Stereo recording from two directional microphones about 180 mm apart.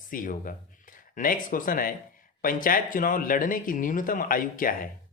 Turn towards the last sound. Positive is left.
turn(degrees=50)  # may be behind; listen again after turning